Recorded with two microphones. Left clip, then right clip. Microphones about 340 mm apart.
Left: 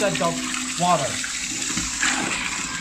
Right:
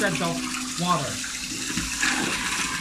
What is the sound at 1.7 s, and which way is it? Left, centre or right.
Water, centre.